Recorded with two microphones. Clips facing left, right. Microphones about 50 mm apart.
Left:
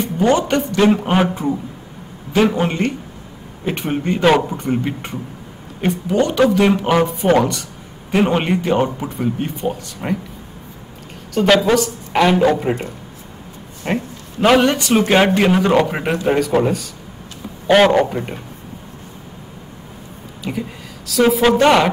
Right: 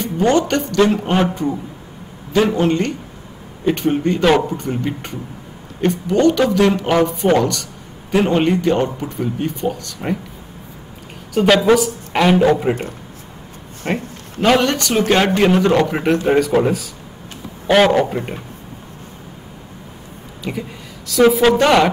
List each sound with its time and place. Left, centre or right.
0.0 s a man's voice: centre
2.5 s a man's voice: centre
11.3 s a woman's voice: centre
13.9 s a man's voice: centre
17.6 s a man's voice: centre
18.1 s speech: centre
21.1 s a man's voice: centre